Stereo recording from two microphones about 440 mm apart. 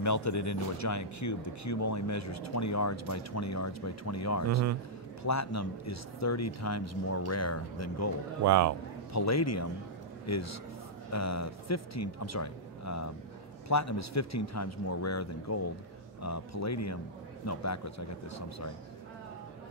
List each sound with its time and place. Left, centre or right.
0.0 s speech: left
8.5 s a man's voice: right
9.1 s speech: left